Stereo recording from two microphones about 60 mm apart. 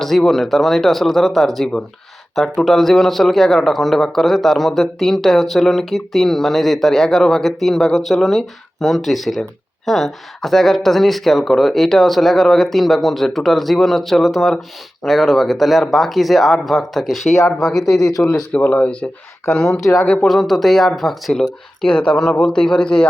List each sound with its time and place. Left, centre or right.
0.0 s speech: centre
18.5 s speech: left
19.8 s speech: centre
21.8 s speech: centre